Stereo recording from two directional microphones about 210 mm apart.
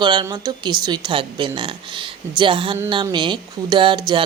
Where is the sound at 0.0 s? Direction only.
20° right (ahead or behind).